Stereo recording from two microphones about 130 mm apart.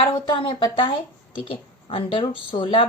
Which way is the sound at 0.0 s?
40° left (ahead or behind).